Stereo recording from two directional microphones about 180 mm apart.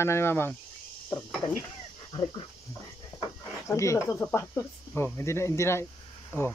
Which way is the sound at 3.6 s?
15° left (ahead or behind).